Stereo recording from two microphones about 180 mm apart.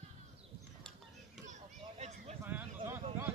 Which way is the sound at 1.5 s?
40° right (ahead or behind).